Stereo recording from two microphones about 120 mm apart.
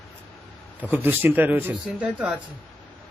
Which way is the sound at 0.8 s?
15° right (ahead or behind).